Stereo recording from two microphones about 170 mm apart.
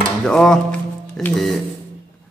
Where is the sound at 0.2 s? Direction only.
5° left (ahead or behind).